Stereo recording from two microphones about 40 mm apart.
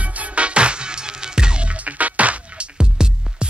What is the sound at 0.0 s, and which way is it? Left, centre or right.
Music, right.